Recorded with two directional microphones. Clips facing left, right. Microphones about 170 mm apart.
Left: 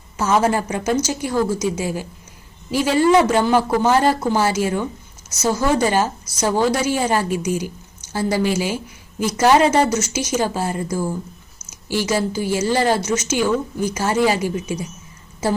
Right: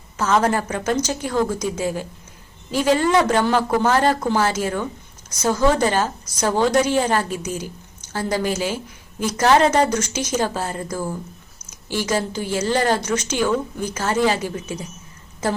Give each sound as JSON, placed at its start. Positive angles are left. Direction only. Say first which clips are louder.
{"t": 0.2, "sound": "a woman's voice", "louder": "left 1 dB", "side_deg": 10}